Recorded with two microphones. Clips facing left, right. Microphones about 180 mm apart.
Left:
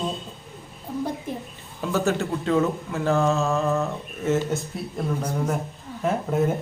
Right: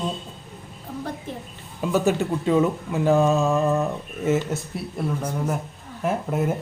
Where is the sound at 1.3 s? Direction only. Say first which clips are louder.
Left 2 dB; 10° left (ahead or behind).